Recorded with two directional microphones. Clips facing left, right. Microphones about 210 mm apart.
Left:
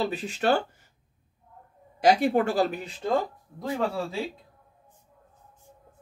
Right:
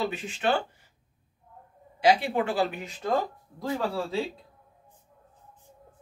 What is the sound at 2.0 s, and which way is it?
Speech, 45° left (ahead or behind).